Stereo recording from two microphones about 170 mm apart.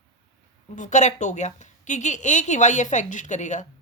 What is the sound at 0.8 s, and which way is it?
Speech, 45° left (ahead or behind).